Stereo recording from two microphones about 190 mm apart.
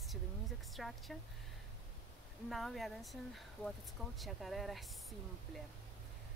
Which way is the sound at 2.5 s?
Centre (ahead or behind).